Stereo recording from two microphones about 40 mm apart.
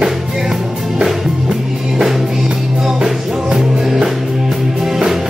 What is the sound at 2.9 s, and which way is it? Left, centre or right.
Music, centre.